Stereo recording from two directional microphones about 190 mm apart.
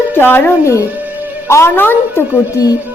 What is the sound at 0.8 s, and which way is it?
Music, 10° right (ahead or behind).